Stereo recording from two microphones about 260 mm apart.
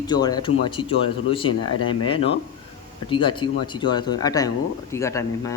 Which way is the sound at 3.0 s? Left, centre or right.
Centre.